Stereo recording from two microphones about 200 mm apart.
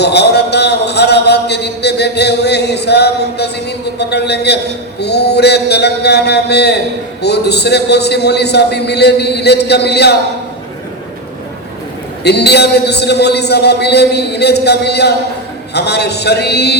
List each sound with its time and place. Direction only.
0.0 s a man's voice: 55° left (ahead or behind)
12.2 s a man's voice: 55° left (ahead or behind)